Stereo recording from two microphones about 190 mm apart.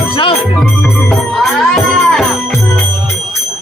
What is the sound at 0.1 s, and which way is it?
Music, 25° left (ahead or behind).